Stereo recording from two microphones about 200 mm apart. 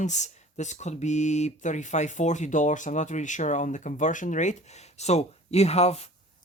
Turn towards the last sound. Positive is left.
turn(degrees=30)  # may be behind; listen again after turning